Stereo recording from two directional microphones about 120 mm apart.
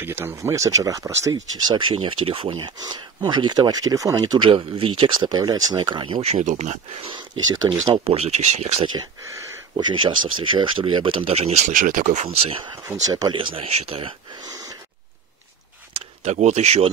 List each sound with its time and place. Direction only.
0.0 s speech: 20° right (ahead or behind)
1.3 s speech: 40° right (ahead or behind)
6.2 s speech: 80° right
7.1 s speech: 40° right (ahead or behind)
8.0 s speech: 55° right (ahead or behind)
9.8 s speech: 40° right (ahead or behind); by 12.3 s 90° right
12.4 s speech: 45° right (ahead or behind)
13.0 s speech: 30° right (ahead or behind)
13.3 s speech: 45° right (ahead or behind)
13.7 s speech: 55° right (ahead or behind)
16.3 s speech: 70° right (ahead or behind)